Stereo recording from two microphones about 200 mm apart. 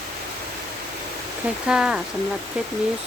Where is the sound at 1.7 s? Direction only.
5° right (ahead or behind).